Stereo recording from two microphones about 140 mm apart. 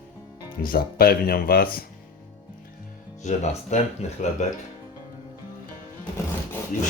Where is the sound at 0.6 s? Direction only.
90° left.